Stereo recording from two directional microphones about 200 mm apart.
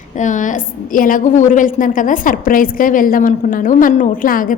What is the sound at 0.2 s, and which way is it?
A woman's voice, 40° left (ahead or behind).